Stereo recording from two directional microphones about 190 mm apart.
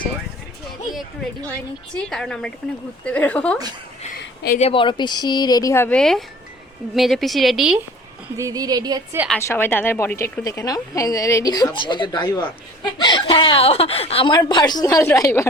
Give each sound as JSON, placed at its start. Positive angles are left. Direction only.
{"t": 2.0, "sound": "a woman's voice", "side_deg": 0}
{"t": 4.5, "sound": "a woman's voice", "side_deg": 30}
{"t": 8.4, "sound": "speech", "side_deg": -20}
{"t": 9.3, "sound": "a woman's voice", "side_deg": 10}